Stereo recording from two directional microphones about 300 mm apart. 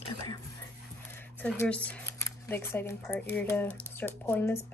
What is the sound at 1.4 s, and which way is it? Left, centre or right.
Speech, centre.